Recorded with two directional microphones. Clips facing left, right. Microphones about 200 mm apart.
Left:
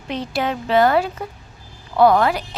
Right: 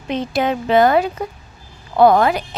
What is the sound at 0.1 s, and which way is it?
Speech, 20° right (ahead or behind).